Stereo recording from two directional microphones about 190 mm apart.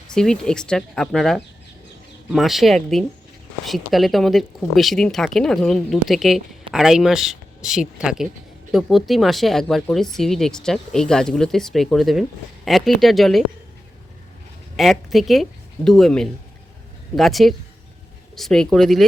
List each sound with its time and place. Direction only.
0.1 s speech: 5° left (ahead or behind)
14.8 s speech: centre (ahead or behind)